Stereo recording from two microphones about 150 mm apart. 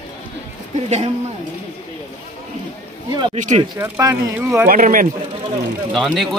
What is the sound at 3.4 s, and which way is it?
Speech, 55° right (ahead or behind).